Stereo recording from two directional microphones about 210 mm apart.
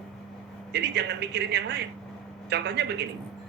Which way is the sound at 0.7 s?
50° right (ahead or behind).